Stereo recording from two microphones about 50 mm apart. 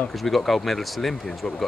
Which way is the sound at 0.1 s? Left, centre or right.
Centre.